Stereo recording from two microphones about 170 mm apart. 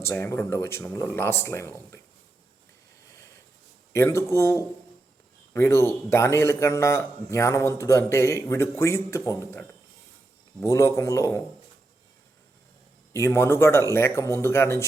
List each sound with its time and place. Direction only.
0.0 s a man's voice: 15° left (ahead or behind)
3.9 s a man's voice: 15° left (ahead or behind)
13.1 s a man's voice: 15° left (ahead or behind)